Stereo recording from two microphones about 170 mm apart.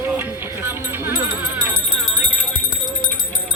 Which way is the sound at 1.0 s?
10° right (ahead or behind).